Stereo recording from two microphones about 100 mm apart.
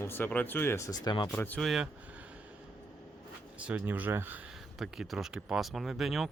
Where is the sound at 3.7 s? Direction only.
15° right (ahead or behind).